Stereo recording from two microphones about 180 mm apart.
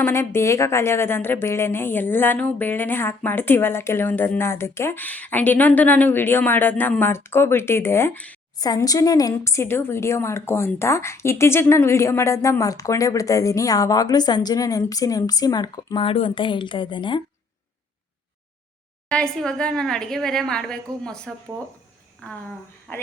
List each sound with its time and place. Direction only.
0.0 s a woman's voice: 15° left (ahead or behind)
8.5 s speech: 20° left (ahead or behind)
19.0 s a woman's voice: 5° left (ahead or behind)